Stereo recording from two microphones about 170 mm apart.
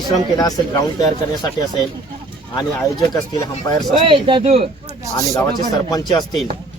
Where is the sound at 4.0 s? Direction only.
30° right (ahead or behind).